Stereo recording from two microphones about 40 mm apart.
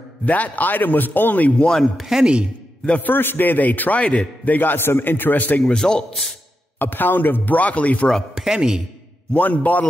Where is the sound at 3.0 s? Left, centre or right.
Left.